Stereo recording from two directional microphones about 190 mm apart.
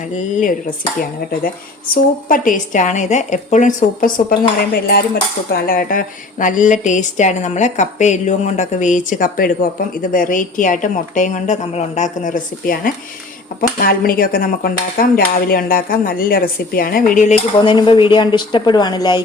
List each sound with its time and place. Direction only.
2.3 s speech: 45° left (ahead or behind)
17.6 s speech: 25° left (ahead or behind)